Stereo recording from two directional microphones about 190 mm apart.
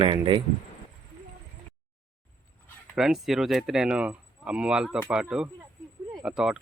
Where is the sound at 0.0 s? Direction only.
25° right (ahead or behind).